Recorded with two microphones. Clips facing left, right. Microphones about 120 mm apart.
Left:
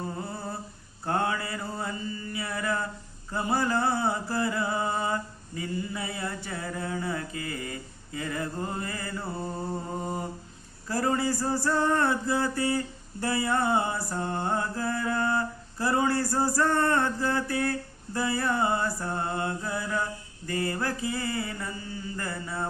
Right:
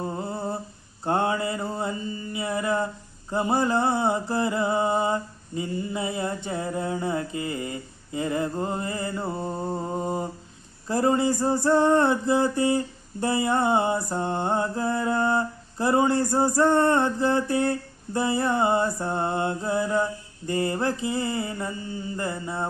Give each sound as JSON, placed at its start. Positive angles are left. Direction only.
{"t": 0.0, "sound": "humming", "side_deg": -25}
{"t": 1.0, "sound": "mantra", "side_deg": -25}